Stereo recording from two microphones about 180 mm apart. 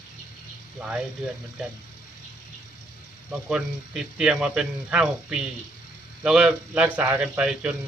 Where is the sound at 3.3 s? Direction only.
5° right (ahead or behind).